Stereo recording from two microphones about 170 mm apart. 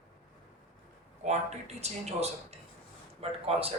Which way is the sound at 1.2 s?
40° right (ahead or behind).